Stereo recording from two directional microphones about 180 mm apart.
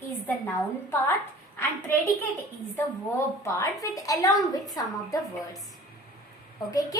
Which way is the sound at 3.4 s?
15° left (ahead or behind).